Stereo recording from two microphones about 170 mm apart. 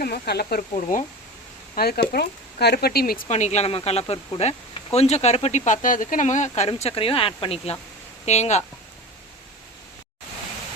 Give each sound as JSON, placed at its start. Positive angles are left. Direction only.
{"t": 0.0, "sound": "speech", "side_deg": 70}
{"t": 0.9, "sound": "speech", "side_deg": 55}
{"t": 1.7, "sound": "speech", "side_deg": 65}
{"t": 3.2, "sound": "speech", "side_deg": 45}